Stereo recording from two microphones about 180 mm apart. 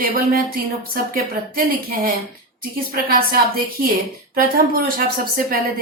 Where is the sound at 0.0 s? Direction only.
50° right (ahead or behind).